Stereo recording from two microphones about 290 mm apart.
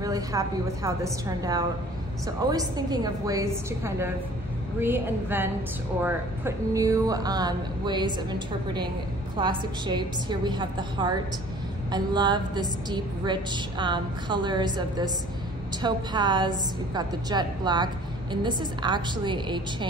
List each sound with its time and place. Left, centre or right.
0.0 s a woman's voice: centre